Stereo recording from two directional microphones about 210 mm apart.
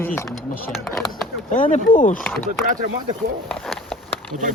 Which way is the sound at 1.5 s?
40° left (ahead or behind).